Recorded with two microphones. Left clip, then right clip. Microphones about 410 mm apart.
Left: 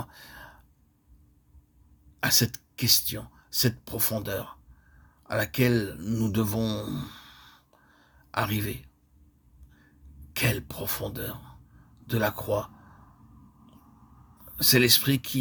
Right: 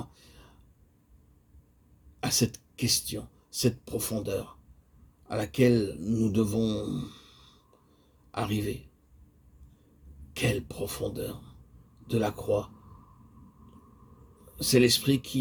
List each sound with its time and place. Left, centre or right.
0.0 s a sound: left
2.2 s speech: left
10.3 s speech: left
14.5 s speech: left